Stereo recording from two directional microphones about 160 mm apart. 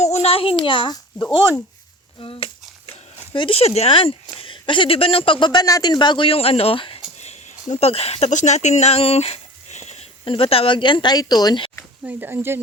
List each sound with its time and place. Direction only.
0.0 s a child's voice: 40° left (ahead or behind)
2.9 s speech: 35° left (ahead or behind)
12.0 s speech: 10° right (ahead or behind)